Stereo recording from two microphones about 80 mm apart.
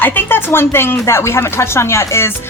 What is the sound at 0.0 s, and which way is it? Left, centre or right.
Speech, left.